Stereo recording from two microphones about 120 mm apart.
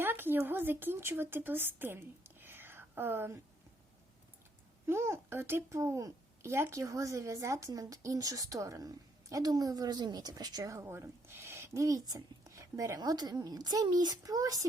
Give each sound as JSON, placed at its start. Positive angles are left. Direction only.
{"t": 0.0, "sound": "speech", "side_deg": -15}
{"t": 4.9, "sound": "a child's voice", "side_deg": -20}